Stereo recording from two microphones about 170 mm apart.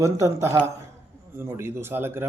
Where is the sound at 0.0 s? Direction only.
15° right (ahead or behind).